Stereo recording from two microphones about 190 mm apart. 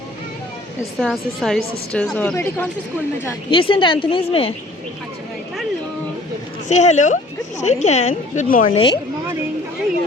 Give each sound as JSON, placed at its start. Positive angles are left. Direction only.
{"t": 0.8, "sound": "a woman's voice", "side_deg": 0}
{"t": 3.5, "sound": "a woman's voice", "side_deg": 25}
{"t": 6.7, "sound": "a woman's voice", "side_deg": 40}
{"t": 8.7, "sound": "a woman's voice", "side_deg": 25}